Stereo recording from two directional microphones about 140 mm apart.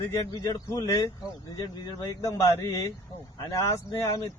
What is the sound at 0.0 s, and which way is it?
Speech, 20° left (ahead or behind).